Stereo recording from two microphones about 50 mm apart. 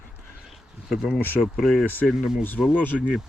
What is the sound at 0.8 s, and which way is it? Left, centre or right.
Speech, centre.